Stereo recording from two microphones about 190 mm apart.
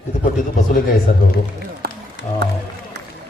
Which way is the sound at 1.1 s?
50° left (ahead or behind).